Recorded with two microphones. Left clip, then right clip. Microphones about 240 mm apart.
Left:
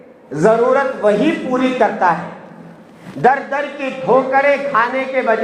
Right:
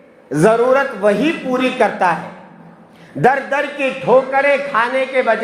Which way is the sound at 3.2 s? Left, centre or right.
Right.